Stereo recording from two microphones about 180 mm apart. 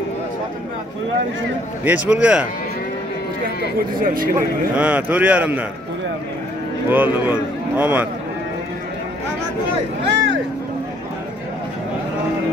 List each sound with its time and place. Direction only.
1.9 s a man's voice: 5° right (ahead or behind)
4.0 s speech: 50° right (ahead or behind)
4.7 s a man's voice: 5° right (ahead or behind)
6.9 s a man's voice: 10° right (ahead or behind)
10.0 s speech: 90° right